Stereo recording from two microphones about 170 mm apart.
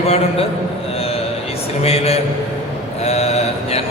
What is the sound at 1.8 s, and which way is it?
Speech, 35° left (ahead or behind).